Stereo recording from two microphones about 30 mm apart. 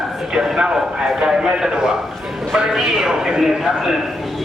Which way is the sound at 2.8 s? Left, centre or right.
Centre.